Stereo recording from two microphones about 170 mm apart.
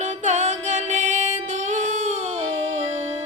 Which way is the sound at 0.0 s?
45° right (ahead or behind).